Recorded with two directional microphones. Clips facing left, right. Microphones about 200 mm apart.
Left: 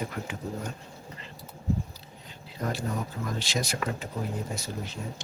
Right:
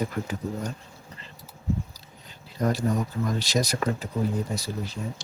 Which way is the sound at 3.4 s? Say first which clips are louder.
Right 5 dB; 40° right (ahead or behind).